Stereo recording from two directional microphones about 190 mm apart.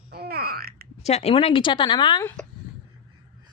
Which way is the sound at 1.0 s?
35° left (ahead or behind).